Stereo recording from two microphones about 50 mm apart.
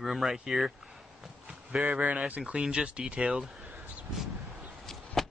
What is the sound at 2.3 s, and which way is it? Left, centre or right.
Speech, right.